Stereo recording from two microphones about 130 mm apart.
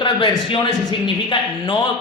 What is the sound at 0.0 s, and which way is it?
A man's voice, 40° left (ahead or behind).